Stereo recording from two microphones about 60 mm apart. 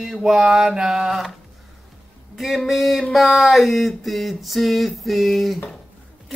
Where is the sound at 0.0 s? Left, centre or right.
Centre.